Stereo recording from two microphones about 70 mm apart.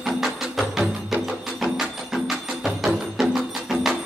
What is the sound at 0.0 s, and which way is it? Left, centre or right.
Music, centre.